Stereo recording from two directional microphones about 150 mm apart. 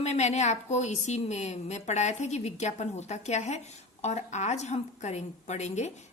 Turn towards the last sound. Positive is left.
turn(degrees=50)  # may be behind; listen again after turning